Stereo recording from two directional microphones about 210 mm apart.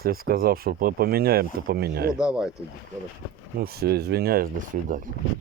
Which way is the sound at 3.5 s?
50° right (ahead or behind).